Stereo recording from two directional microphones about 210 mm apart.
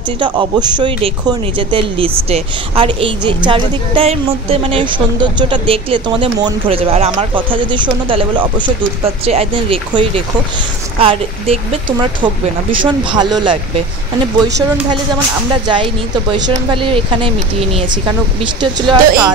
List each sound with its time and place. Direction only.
0.2 s speech: 20° right (ahead or behind)
15.6 s speech: 25° right (ahead or behind)